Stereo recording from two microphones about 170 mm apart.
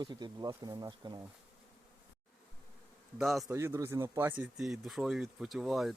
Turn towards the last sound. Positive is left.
turn(degrees=0)  # may be behind; listen again after turning